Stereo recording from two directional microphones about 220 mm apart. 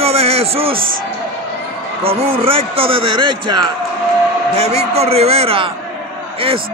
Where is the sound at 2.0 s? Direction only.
25° right (ahead or behind).